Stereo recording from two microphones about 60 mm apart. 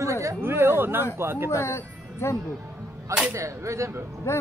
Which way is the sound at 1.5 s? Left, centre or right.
Left.